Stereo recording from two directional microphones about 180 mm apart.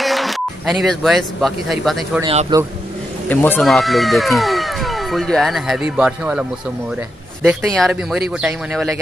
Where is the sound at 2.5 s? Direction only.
20° right (ahead or behind).